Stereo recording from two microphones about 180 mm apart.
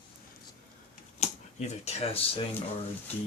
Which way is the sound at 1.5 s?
40° left (ahead or behind).